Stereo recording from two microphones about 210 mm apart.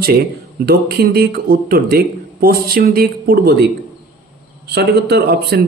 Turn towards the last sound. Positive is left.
turn(degrees=-50)  # may be behind; listen again after turning